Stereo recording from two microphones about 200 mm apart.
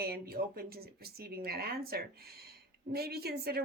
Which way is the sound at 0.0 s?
50° right (ahead or behind).